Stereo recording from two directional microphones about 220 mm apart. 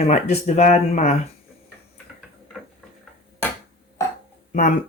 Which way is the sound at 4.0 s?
15° left (ahead or behind).